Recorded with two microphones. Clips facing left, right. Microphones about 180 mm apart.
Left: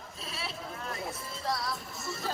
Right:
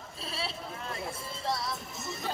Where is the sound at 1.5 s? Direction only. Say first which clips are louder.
Even; 25° right (ahead or behind).